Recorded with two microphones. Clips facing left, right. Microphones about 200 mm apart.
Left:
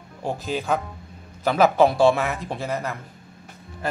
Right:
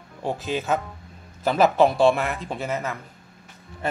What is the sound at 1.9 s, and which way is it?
Speech, 20° right (ahead or behind).